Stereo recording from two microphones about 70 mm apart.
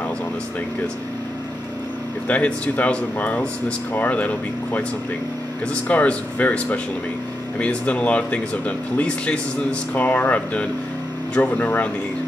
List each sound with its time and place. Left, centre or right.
2.2 s speech: centre